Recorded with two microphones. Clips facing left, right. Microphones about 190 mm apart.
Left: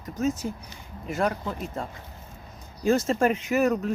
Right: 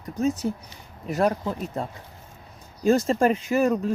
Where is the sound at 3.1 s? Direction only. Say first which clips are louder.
Right 2 dB; 35° right (ahead or behind).